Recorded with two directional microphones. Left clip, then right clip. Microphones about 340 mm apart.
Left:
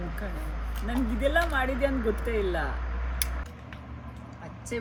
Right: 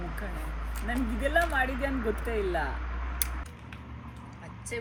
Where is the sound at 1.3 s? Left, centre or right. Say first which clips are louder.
Right 1 dB; centre.